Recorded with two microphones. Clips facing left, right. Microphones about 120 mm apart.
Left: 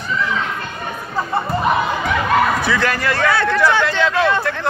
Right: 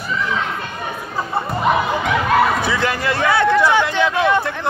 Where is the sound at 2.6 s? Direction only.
20° right (ahead or behind).